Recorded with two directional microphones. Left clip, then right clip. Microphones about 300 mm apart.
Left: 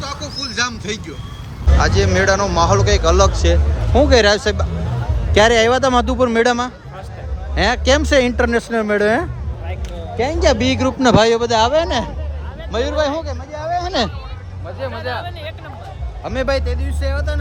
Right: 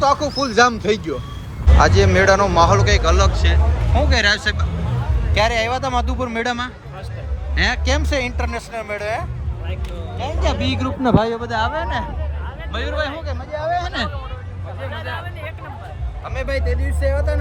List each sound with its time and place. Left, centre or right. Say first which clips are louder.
0.0 s a man's voice: right 9 dB; centre; by 12.0 s left
12.7 s a man's voice: left 6 dB; centre
14.9 s speech: left 4 dB; centre
16.2 s speech: left 6 dB; left
16.5 s a man's voice: left 4 dB; centre